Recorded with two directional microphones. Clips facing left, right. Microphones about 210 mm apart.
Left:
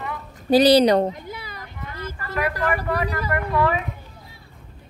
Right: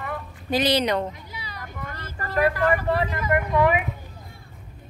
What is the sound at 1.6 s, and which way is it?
Vehicle, 50° right (ahead or behind).